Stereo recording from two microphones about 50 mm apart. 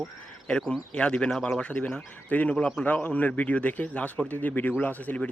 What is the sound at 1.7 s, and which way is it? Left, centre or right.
A man's voice, left.